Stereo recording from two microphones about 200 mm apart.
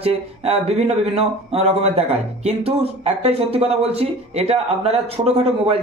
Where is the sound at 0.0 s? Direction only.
30° right (ahead or behind).